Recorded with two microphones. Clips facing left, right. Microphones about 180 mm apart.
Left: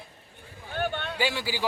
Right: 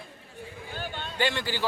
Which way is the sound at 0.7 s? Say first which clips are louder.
Left 8 dB; 65° left (ahead or behind).